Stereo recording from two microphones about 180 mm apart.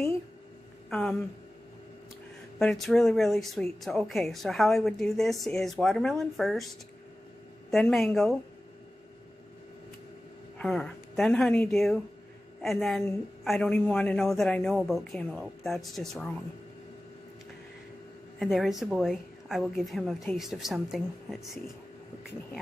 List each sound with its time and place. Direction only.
0.8 s speech: centre (ahead or behind)
2.6 s a woman's voice: centre (ahead or behind)
7.7 s a woman's voice: 5° left (ahead or behind)
10.6 s a woman's voice: 5° left (ahead or behind)
18.4 s a woman's voice: centre (ahead or behind)